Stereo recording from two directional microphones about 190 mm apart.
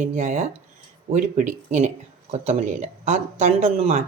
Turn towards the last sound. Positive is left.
turn(degrees=-30)  # may be behind; listen again after turning